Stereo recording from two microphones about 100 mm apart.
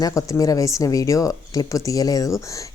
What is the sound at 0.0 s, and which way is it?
A woman's voice, 35° left (ahead or behind).